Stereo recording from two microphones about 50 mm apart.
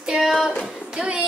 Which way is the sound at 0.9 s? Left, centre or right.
Right.